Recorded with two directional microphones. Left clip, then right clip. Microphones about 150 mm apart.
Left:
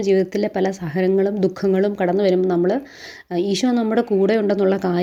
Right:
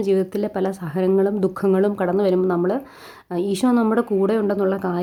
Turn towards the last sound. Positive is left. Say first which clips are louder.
# left 3 dB
turn(degrees=15)  # may be behind; listen again after turning